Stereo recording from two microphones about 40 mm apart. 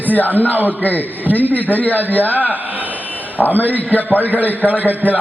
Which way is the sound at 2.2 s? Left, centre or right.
Right.